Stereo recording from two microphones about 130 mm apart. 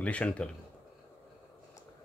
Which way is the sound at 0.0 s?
10° left (ahead or behind).